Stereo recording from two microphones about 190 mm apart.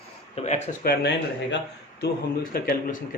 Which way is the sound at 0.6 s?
60° left (ahead or behind).